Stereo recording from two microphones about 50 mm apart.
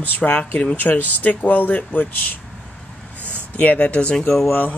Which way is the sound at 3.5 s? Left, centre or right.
Left.